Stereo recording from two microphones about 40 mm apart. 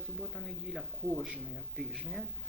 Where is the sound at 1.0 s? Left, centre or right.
Right.